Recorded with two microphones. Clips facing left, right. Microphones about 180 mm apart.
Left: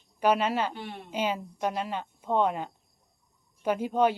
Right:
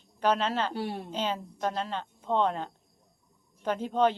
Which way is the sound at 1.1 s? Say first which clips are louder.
Left 2 dB; 10° left (ahead or behind).